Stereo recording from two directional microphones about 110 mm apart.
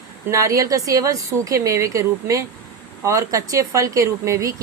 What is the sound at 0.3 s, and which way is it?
A woman's voice, 30° right (ahead or behind).